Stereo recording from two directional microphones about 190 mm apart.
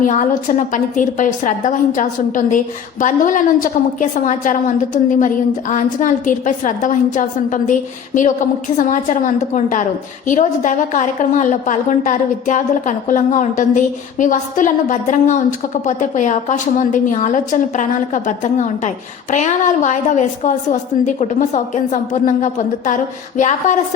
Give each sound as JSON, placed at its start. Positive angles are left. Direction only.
{"t": 0.0, "sound": "a woman's voice", "side_deg": 40}